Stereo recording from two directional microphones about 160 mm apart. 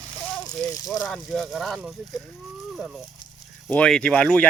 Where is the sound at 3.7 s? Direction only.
5° left (ahead or behind).